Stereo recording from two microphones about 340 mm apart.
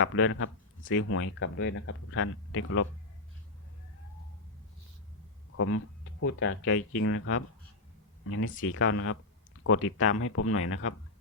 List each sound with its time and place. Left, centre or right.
0.0 s speech: left
5.5 s speech: left